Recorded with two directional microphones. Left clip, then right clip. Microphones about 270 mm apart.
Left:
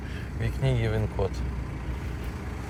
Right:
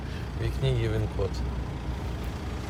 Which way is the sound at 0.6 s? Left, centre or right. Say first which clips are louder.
Left 1 dB; right.